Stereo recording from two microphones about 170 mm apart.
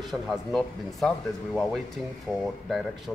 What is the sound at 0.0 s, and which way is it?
Speech, centre (ahead or behind).